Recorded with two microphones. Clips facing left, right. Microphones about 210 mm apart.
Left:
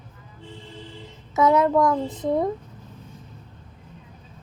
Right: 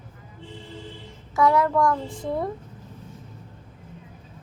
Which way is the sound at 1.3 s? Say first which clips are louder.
Left 2 dB; 20° left (ahead or behind).